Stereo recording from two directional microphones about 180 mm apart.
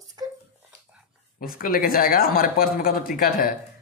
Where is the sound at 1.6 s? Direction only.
55° left (ahead or behind).